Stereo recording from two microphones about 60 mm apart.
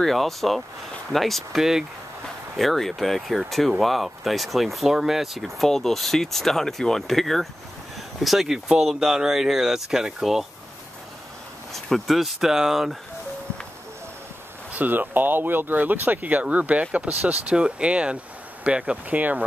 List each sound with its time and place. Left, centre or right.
0.0 s speech: centre
11.7 s speech: centre
14.7 s speech: right